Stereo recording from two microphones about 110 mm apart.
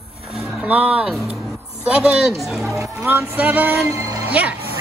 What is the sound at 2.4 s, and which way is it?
Speech, centre (ahead or behind).